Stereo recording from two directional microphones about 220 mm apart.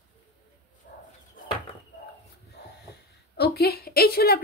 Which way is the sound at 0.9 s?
40° left (ahead or behind).